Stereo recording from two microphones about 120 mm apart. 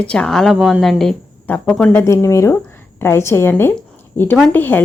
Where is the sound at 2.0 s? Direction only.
25° left (ahead or behind).